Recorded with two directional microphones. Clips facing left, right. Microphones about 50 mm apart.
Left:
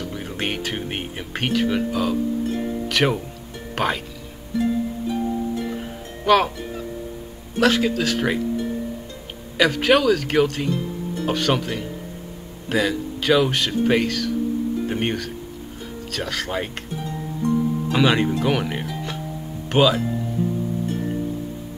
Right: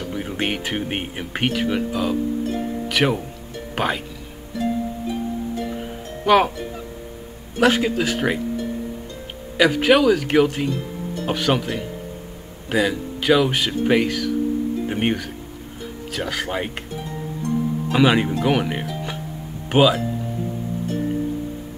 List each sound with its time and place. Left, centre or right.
0.1 s speech: centre
6.2 s speech: centre
7.6 s speech: centre
9.6 s speech: centre
17.8 s speech: centre